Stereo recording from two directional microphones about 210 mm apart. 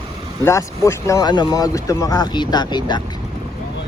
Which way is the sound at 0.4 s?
15° left (ahead or behind).